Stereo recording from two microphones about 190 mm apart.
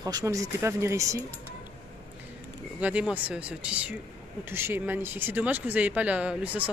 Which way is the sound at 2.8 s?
5° right (ahead or behind).